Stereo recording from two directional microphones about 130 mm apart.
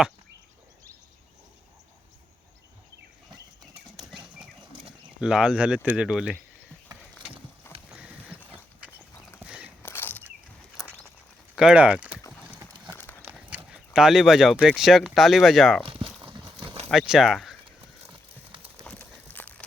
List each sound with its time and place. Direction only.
3.9 s bird flight: 35° right (ahead or behind)
5.2 s speech: 5° right (ahead or behind)
7.9 s a sound: 10° right (ahead or behind)
9.4 s walk: 10° right (ahead or behind)
9.8 s a sound: 15° left (ahead or behind)
10.8 s a sound: 25° left (ahead or behind)
11.5 s speech: 5° right (ahead or behind)
12.9 s horse: 15° left (ahead or behind)
13.2 s horse: 10° right (ahead or behind)
13.7 s speech: 5° right (ahead or behind)
15.9 s a sound: 45° right (ahead or behind)
16.9 s speech: 5° right (ahead or behind)
18.8 s crumpling: 10° left (ahead or behind)